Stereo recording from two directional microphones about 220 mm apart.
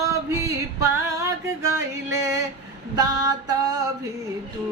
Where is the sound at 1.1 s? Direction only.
15° right (ahead or behind).